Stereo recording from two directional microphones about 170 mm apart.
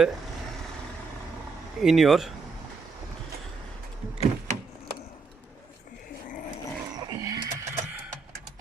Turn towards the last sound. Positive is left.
turn(degrees=-15)  # may be behind; listen again after turning